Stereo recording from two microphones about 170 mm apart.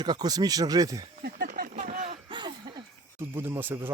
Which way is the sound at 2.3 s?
25° right (ahead or behind).